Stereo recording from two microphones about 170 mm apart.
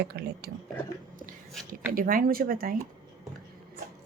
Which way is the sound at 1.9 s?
55° right (ahead or behind).